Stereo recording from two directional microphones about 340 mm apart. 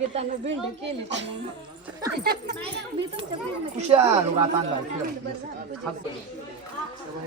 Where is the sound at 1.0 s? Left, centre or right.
Right.